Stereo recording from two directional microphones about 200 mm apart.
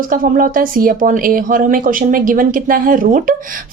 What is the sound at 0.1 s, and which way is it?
A woman's voice, 45° right (ahead or behind).